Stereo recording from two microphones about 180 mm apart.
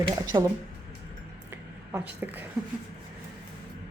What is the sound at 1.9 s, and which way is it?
Speech, 10° right (ahead or behind).